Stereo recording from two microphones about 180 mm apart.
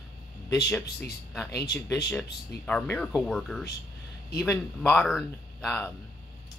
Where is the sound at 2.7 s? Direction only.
5° left (ahead or behind).